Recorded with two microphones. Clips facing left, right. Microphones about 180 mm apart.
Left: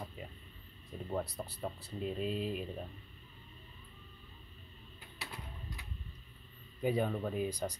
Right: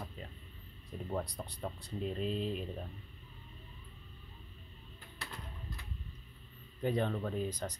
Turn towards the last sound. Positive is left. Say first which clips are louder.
# left 1 dB
turn(degrees=10)  # may be behind; listen again after turning